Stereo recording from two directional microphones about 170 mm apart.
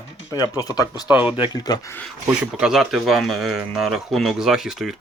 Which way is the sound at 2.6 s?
Centre (ahead or behind).